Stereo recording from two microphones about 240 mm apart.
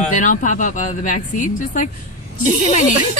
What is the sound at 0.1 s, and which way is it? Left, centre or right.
Speech, left.